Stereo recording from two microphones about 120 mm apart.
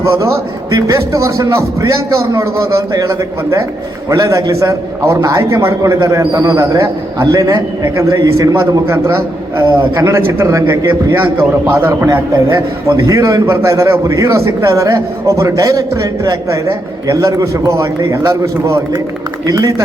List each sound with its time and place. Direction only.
0.0 s a man's voice: 25° right (ahead or behind)